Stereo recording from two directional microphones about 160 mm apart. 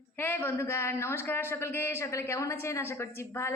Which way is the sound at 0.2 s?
10° left (ahead or behind).